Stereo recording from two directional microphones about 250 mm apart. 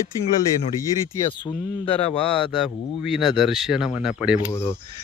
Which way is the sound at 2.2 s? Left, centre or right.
Centre.